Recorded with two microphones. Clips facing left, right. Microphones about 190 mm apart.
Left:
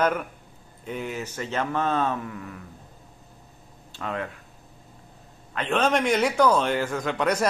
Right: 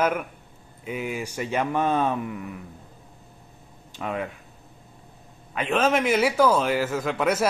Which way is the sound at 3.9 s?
15° right (ahead or behind).